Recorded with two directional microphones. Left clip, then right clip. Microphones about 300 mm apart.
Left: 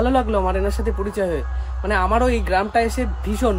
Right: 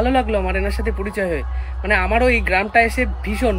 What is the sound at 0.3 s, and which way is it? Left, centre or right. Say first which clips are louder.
Speech: even; centre.